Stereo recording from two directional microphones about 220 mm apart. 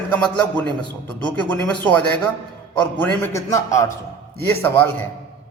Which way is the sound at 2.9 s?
10° left (ahead or behind).